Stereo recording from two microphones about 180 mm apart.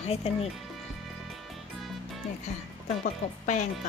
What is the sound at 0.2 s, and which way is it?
Music, 35° left (ahead or behind).